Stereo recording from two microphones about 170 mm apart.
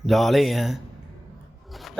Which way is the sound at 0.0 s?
Centre (ahead or behind).